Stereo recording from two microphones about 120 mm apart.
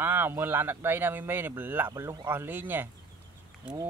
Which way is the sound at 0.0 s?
20° right (ahead or behind).